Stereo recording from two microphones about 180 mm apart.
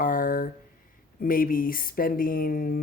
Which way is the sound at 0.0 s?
50° left (ahead or behind).